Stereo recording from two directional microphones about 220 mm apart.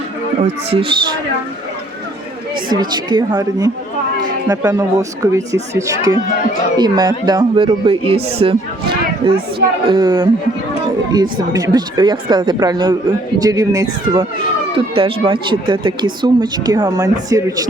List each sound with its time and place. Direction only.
0.4 s speech: 25° right (ahead or behind)
2.6 s speech: 20° right (ahead or behind)